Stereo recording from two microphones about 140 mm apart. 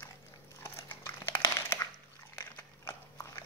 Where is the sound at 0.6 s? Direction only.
20° left (ahead or behind).